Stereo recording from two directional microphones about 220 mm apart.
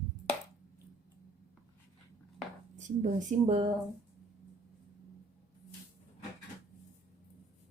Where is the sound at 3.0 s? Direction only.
30° right (ahead or behind).